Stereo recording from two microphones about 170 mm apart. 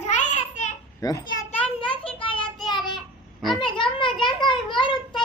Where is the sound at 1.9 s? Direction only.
30° left (ahead or behind).